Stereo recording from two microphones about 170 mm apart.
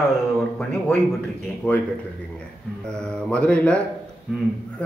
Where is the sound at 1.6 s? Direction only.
10° left (ahead or behind).